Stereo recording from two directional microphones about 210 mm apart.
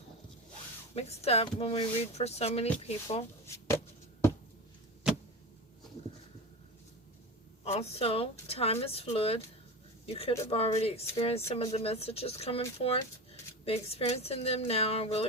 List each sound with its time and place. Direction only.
0.9 s speech: 30° left (ahead or behind)
7.6 s speech: 30° left (ahead or behind)